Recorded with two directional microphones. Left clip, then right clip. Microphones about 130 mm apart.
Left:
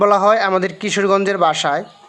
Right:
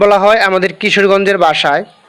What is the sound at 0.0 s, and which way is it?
A man's voice, 20° right (ahead or behind).